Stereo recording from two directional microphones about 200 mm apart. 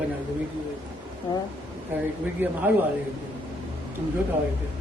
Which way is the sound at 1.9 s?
10° right (ahead or behind).